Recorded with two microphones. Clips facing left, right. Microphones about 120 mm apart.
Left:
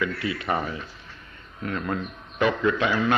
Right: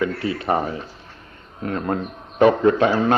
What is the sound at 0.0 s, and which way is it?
A man's voice, 40° right (ahead or behind).